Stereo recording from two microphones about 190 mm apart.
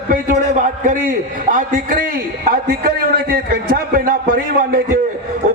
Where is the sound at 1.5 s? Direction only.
45° right (ahead or behind).